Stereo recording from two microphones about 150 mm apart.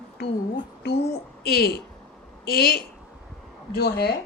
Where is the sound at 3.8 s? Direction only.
90° left.